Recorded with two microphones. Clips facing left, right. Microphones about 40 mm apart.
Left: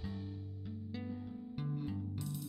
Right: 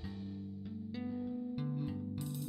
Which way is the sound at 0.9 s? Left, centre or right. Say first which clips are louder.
Right 5 dB; centre.